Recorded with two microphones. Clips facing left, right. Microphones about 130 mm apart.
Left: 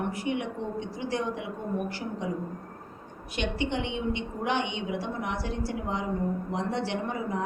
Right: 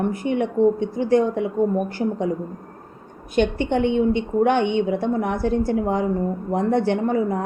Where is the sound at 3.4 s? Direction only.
50° right (ahead or behind).